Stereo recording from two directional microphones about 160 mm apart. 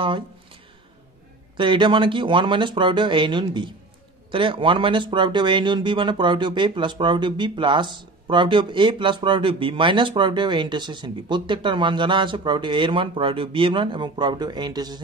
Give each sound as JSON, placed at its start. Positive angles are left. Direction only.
{"t": 1.6, "sound": "speech", "side_deg": -30}